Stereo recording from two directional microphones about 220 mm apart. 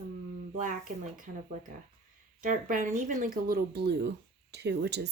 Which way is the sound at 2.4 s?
35° right (ahead or behind).